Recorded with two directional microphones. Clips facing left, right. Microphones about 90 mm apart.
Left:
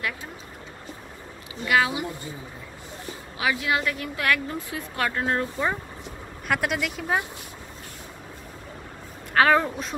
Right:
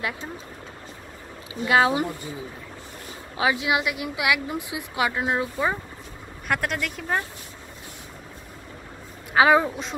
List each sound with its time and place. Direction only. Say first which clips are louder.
1.6 s speech: right 3 dB; 30° right (ahead or behind)
3.3 s a woman's voice: right 2 dB; 20° right (ahead or behind); by 7.2 s 5° left (ahead or behind)
9.3 s a woman's voice: right 2 dB; 10° right (ahead or behind)